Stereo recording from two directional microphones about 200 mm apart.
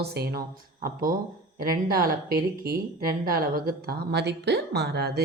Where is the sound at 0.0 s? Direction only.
55° right (ahead or behind).